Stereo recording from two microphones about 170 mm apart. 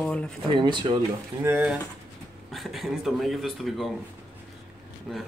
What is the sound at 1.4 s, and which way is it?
Speech, 10° right (ahead or behind).